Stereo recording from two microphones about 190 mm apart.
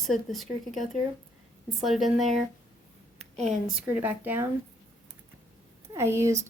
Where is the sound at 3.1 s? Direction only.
35° right (ahead or behind).